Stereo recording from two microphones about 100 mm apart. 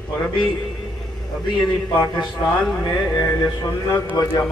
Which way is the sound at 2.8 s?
45° left (ahead or behind).